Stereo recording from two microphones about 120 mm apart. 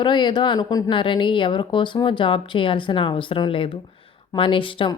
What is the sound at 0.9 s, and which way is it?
A woman's voice, 45° left (ahead or behind).